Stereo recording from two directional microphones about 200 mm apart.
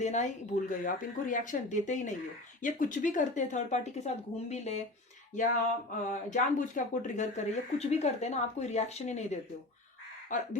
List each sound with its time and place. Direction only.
0.0 s speech: 35° left (ahead or behind)
6.1 s speech: 40° left (ahead or behind)